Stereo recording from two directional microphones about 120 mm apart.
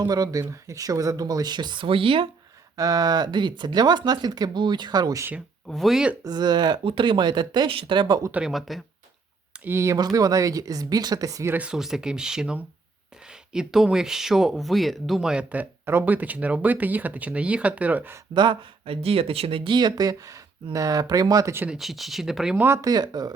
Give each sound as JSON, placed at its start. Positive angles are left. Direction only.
{"t": 0.0, "sound": "speech", "side_deg": -30}
{"t": 2.7, "sound": "speech", "side_deg": -30}
{"t": 5.6, "sound": "speech", "side_deg": 0}
{"t": 6.2, "sound": "speech", "side_deg": -35}
{"t": 8.3, "sound": "speech", "side_deg": -5}
{"t": 9.6, "sound": "speech", "side_deg": -25}
{"t": 11.5, "sound": "speech", "side_deg": -10}
{"t": 18.3, "sound": "speech", "side_deg": -45}
{"t": 21.7, "sound": "speech", "side_deg": 0}
{"t": 22.5, "sound": "speech", "side_deg": -20}